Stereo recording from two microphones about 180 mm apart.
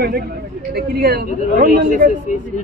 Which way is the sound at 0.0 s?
60° right (ahead or behind).